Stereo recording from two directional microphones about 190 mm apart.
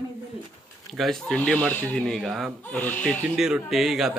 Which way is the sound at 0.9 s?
Centre (ahead or behind).